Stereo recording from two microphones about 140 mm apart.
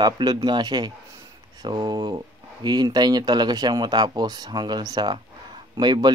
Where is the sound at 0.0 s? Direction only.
30° right (ahead or behind).